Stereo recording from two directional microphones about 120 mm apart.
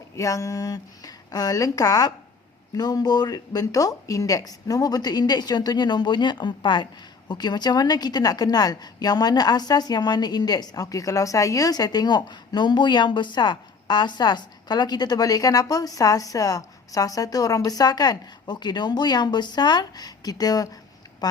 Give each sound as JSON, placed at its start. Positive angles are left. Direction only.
{"t": 0.2, "sound": "a woman's voice", "side_deg": 30}